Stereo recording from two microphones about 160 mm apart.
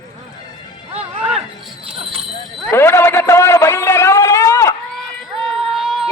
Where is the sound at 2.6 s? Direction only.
15° left (ahead or behind).